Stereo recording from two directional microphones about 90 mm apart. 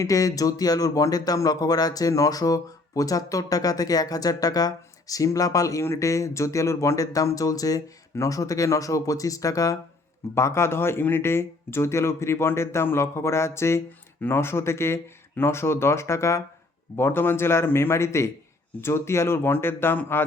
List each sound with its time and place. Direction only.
0.0 s speech: 40° left (ahead or behind)